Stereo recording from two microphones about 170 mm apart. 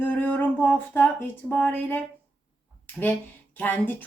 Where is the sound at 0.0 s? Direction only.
10° left (ahead or behind).